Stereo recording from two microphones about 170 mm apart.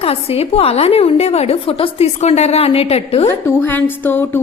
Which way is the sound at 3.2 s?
15° left (ahead or behind).